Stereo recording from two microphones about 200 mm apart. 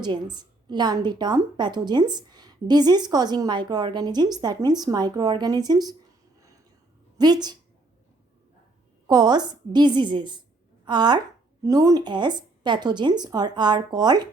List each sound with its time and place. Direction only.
0.0 s a woman's voice: 20° right (ahead or behind)
7.2 s a woman's voice: 20° right (ahead or behind)
9.0 s a woman's voice: 20° right (ahead or behind)